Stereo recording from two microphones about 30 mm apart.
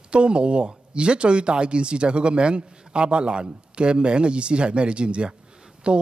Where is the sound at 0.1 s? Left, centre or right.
Right.